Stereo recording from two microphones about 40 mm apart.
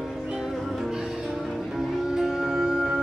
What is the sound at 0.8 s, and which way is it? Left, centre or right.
Music, centre.